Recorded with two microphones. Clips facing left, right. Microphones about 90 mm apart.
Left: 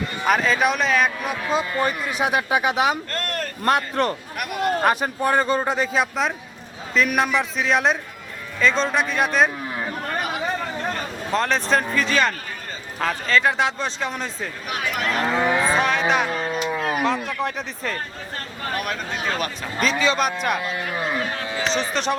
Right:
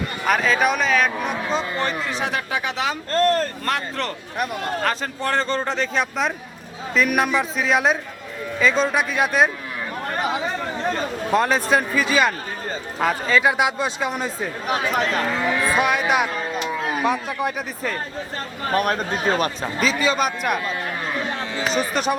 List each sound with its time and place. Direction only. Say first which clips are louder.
0.3 s a man's voice: even; centre (ahead or behind); by 3.0 s 15° left (ahead or behind)
3.1 s speech: right 9 dB; 30° right (ahead or behind)
3.6 s a man's voice: left 5 dB; 20° left (ahead or behind); by 9.5 s 5° right (ahead or behind)
11.3 s speech: right 2 dB; 5° right (ahead or behind)
14.7 s speech: right 5 dB; 35° right (ahead or behind)
15.4 s speech: left 4 dB; 25° left (ahead or behind)
15.8 s speech: right 1 dB; 10° right (ahead or behind)
18.7 s speech: right 7 dB; 40° right (ahead or behind)
19.8 s a man's voice: even; 5° right (ahead or behind)
21.6 s speech: right 1 dB; 5° right (ahead or behind)